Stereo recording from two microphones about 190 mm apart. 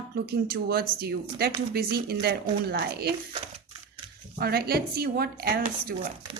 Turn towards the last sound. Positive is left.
turn(degrees=-55)  # may be behind; listen again after turning